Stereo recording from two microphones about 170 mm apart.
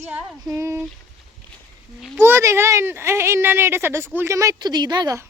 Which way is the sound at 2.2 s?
15° right (ahead or behind).